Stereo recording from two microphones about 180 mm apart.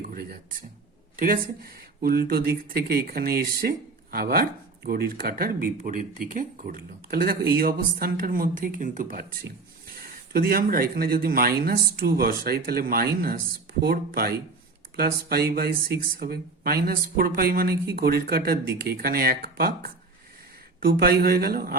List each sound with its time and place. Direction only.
0.1 s speech: 55° right (ahead or behind)